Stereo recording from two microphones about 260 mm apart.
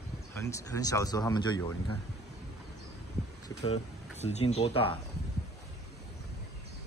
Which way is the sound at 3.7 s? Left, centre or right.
Left.